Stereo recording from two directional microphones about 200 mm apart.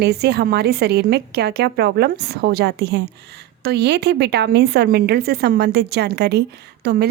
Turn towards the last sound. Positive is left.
turn(degrees=-55)  # may be behind; listen again after turning